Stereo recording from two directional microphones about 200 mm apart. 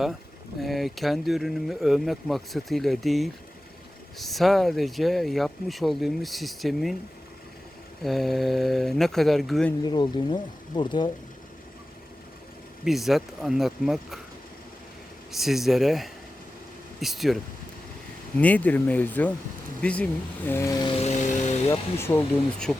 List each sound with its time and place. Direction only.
0.6 s speech: centre (ahead or behind)
8.0 s speech: centre (ahead or behind)
9.8 s speech: 20° left (ahead or behind)
12.8 s speech: centre (ahead or behind)
15.3 s speech: centre (ahead or behind); by 21.6 s 35° left (ahead or behind)
21.7 s speech: 10° left (ahead or behind)